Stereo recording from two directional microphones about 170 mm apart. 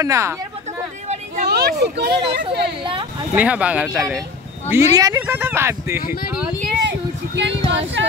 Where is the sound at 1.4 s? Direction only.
70° right (ahead or behind).